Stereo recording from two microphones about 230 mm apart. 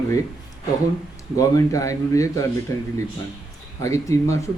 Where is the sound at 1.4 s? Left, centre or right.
Centre.